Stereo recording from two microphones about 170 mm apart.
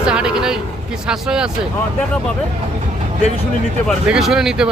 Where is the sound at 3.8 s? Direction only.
Centre (ahead or behind).